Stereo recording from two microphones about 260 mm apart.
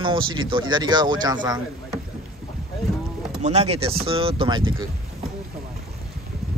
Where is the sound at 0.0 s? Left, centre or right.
Centre.